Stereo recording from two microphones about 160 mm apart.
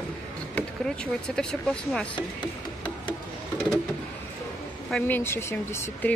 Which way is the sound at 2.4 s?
30° left (ahead or behind).